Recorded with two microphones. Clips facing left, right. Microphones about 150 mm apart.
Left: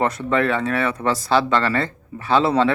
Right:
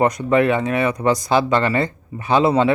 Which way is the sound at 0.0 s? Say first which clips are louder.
Right 4 dB; 15° right (ahead or behind).